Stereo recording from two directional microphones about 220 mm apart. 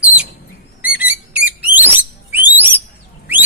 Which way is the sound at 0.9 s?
5° right (ahead or behind).